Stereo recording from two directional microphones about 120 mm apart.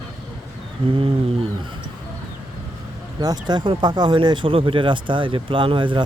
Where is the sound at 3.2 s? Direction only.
35° right (ahead or behind).